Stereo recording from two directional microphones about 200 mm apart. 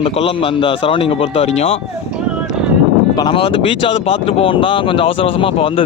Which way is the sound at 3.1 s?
25° left (ahead or behind).